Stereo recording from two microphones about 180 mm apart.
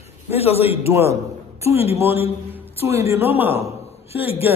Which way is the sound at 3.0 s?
15° right (ahead or behind).